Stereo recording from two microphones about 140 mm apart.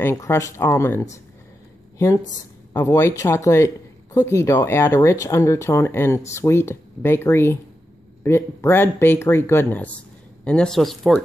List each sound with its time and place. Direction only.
0.0 s speech: 20° left (ahead or behind); by 11.1 s centre (ahead or behind)